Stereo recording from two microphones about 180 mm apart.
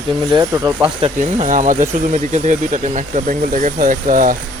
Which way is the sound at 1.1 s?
45° right (ahead or behind).